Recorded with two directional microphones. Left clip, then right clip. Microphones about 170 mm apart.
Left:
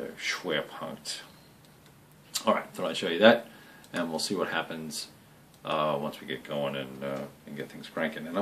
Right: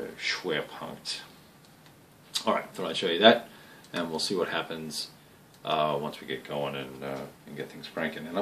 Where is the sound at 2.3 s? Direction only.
20° left (ahead or behind).